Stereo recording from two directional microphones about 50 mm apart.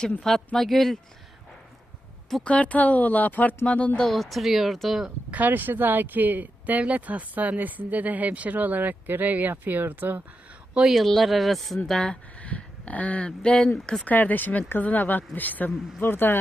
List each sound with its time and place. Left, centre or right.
0.2 s speech: centre
2.4 s speech: left
4.0 s speech: centre
5.3 s speech: right
10.9 s speech: centre
11.9 s speech: centre
12.4 s speech: left
14.0 s speech: left
16.0 s speech: left